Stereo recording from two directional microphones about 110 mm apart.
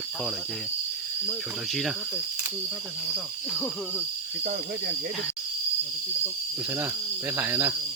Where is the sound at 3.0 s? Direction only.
5° right (ahead or behind).